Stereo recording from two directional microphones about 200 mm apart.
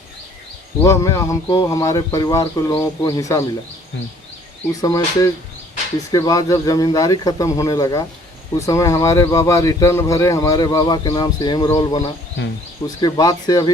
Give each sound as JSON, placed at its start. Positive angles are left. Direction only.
{"t": 0.8, "sound": "speech", "side_deg": 15}
{"t": 4.7, "sound": "speech", "side_deg": 15}